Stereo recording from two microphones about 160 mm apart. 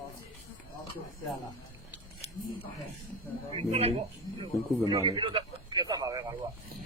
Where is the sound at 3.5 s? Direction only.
40° right (ahead or behind).